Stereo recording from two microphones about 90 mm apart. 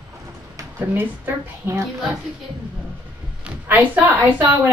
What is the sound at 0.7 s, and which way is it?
A woman's voice, 25° right (ahead or behind).